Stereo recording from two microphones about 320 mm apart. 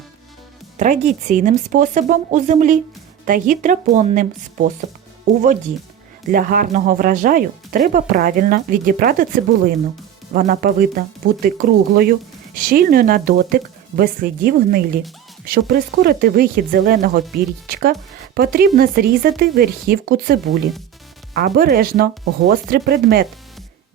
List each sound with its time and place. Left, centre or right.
0.8 s speech: right